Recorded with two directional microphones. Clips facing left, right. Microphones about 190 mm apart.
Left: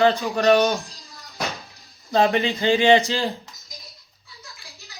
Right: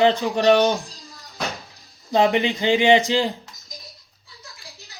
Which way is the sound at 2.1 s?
15° right (ahead or behind).